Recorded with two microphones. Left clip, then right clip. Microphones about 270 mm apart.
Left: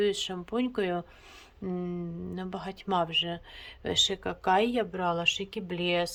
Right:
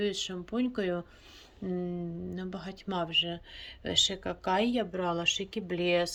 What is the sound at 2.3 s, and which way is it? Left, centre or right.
Speech, centre.